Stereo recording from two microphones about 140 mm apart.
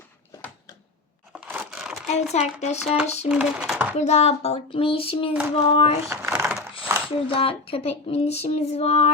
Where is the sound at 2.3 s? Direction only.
50° left (ahead or behind).